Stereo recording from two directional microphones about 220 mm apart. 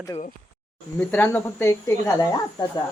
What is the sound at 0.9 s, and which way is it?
Speech, 10° left (ahead or behind).